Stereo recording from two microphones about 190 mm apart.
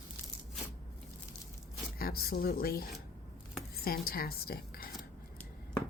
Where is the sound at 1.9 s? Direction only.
55° left (ahead or behind).